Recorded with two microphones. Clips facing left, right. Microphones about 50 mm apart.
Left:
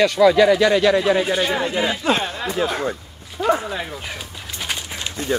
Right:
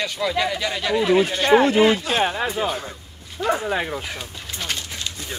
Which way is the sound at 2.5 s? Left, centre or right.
Left.